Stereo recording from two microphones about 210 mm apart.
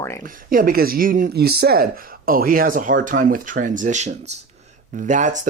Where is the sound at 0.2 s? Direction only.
45° right (ahead or behind).